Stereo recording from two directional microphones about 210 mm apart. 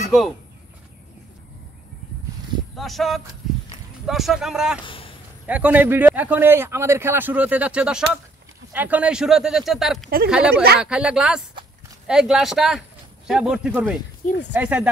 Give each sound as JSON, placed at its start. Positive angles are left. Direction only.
{"t": 2.7, "sound": "speech", "side_deg": 0}
{"t": 4.8, "sound": "a sound", "side_deg": 25}
{"t": 5.5, "sound": "speech", "side_deg": -5}
{"t": 10.0, "sound": "speech", "side_deg": -45}
{"t": 10.3, "sound": "speech", "side_deg": -5}
{"t": 14.2, "sound": "speech", "side_deg": 50}
{"t": 14.5, "sound": "speech", "side_deg": -5}